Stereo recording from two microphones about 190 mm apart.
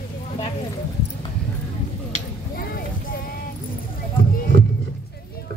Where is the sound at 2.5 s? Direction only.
50° left (ahead or behind).